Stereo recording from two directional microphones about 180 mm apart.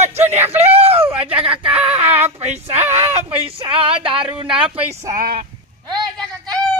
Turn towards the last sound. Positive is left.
turn(degrees=5)  # may be behind; listen again after turning